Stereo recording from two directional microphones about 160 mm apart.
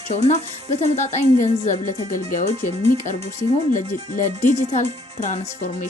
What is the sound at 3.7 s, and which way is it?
Speech, 55° left (ahead or behind).